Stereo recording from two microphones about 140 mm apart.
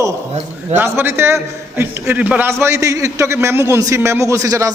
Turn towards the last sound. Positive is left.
turn(degrees=-25)  # may be behind; listen again after turning